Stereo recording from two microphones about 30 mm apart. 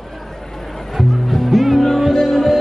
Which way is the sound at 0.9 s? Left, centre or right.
Centre.